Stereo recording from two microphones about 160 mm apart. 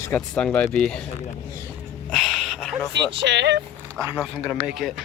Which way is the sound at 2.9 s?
90° right.